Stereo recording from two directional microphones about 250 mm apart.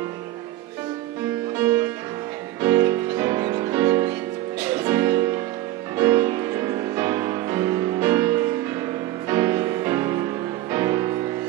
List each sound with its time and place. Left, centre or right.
1.6 s music: centre